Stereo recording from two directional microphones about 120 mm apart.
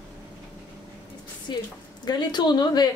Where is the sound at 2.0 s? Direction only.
40° left (ahead or behind).